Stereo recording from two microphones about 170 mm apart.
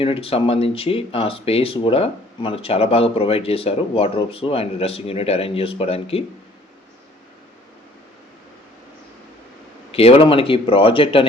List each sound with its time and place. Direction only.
0.0 s speech: 35° left (ahead or behind)
9.9 s speech: 35° left (ahead or behind)